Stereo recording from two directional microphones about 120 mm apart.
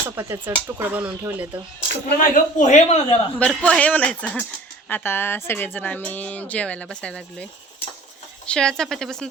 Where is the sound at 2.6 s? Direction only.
80° left.